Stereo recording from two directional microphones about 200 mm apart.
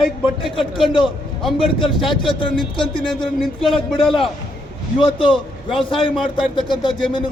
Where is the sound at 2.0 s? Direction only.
25° left (ahead or behind).